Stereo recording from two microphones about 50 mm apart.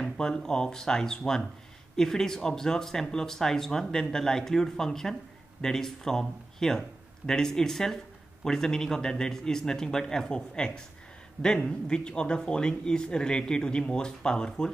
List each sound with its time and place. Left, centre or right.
0.0 s speech: centre